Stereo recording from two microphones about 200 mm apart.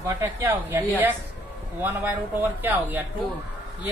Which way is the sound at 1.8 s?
10° right (ahead or behind).